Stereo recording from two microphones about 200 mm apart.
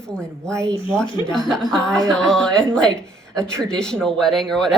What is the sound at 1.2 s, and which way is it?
Speech, 5° left (ahead or behind).